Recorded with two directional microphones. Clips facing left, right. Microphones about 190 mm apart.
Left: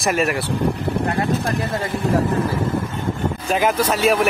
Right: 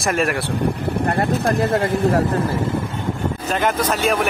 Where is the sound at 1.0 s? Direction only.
55° right (ahead or behind).